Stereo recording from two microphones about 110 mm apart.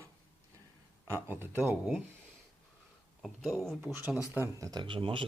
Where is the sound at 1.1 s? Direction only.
20° right (ahead or behind).